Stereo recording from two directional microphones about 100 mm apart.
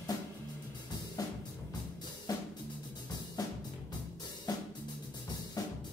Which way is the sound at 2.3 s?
40° left (ahead or behind).